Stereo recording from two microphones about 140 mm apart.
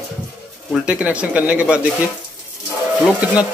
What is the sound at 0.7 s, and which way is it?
Speech, 10° right (ahead or behind).